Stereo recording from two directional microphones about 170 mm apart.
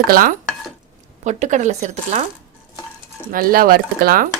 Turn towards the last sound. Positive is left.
turn(degrees=-60)  # may be behind; listen again after turning